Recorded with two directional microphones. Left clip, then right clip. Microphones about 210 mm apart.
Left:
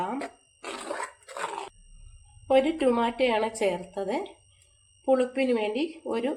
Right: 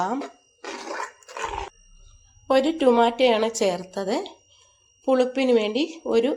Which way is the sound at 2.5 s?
35° right (ahead or behind).